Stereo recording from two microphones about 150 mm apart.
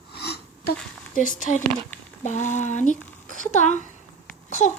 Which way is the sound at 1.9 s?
15° left (ahead or behind).